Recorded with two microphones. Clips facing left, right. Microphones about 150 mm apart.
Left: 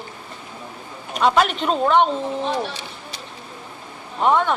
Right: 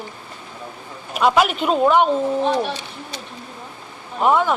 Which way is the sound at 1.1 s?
5° right (ahead or behind).